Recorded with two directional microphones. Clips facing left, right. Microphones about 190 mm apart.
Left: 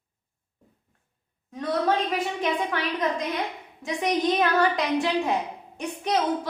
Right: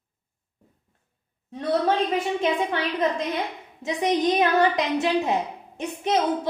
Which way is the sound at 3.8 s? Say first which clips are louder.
Right 2 dB; 20° right (ahead or behind).